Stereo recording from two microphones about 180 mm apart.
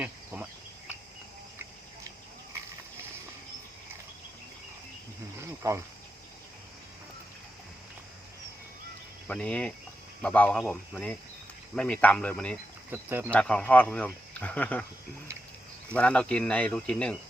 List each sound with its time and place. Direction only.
5.4 s cricket: 15° right (ahead or behind)
9.2 s speech: 5° left (ahead or behind)
12.9 s speech: 10° right (ahead or behind)
13.3 s speech: 5° left (ahead or behind)
16.0 s speech: 5° left (ahead or behind)